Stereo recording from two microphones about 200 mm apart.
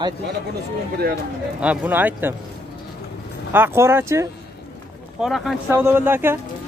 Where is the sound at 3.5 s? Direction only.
10° right (ahead or behind).